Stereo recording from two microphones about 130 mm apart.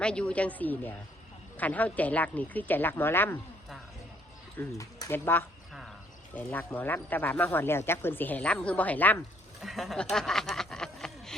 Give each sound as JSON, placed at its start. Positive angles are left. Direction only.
{"t": 0.0, "sound": "speech", "side_deg": 10}
{"t": 4.5, "sound": "speech", "side_deg": 25}
{"t": 9.6, "sound": "speech", "side_deg": 0}